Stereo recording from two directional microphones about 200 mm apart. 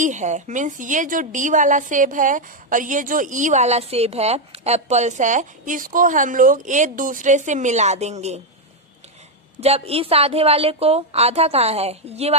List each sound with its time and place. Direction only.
0.0 s a woman's voice: 35° right (ahead or behind)
9.6 s a woman's voice: 30° right (ahead or behind)